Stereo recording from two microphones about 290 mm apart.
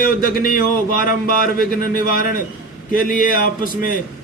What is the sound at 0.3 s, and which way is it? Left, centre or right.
Speech, left.